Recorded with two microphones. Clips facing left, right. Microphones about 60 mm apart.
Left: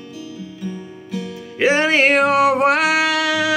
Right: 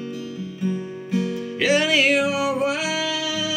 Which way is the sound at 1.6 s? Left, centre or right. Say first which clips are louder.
Left 4 dB; left.